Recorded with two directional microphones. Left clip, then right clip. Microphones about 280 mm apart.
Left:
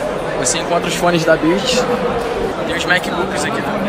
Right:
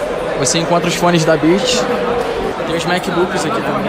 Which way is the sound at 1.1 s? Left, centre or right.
Right.